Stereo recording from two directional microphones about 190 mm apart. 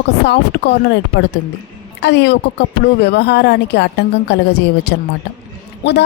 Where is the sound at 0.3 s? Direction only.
60° left (ahead or behind).